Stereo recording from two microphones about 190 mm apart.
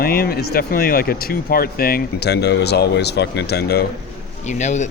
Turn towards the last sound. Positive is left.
turn(degrees=40)  # may be behind; listen again after turning